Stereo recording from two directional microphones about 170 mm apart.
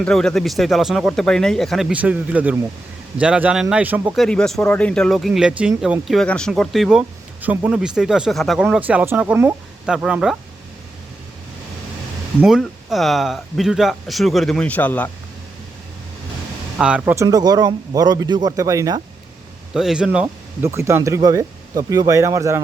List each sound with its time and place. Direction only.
0.0 s speech: 5° left (ahead or behind)
4.2 s speech: 5° left (ahead or behind)
12.4 s speech: 5° right (ahead or behind)
16.7 s speech: 5° right (ahead or behind)
17.2 s speech: 25° right (ahead or behind)
19.7 s speech: 5° right (ahead or behind)